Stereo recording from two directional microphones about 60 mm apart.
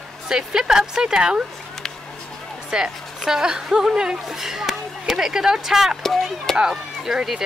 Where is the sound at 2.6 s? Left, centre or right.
Centre.